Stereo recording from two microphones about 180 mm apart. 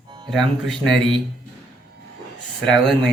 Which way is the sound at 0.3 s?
Centre (ahead or behind).